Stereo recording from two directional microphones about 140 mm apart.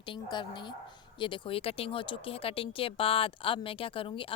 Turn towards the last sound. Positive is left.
turn(degrees=40)  # may be behind; listen again after turning